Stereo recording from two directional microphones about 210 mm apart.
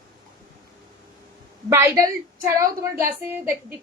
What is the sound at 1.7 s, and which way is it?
Speech, 15° right (ahead or behind).